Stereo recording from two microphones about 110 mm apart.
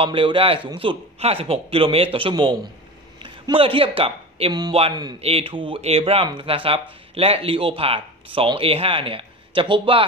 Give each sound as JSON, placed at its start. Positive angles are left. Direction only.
{"t": 0.0, "sound": "a man's voice", "side_deg": -50}
{"t": 4.5, "sound": "speech", "side_deg": -40}
{"t": 5.2, "sound": "speech", "side_deg": -60}
{"t": 6.2, "sound": "speech", "side_deg": -50}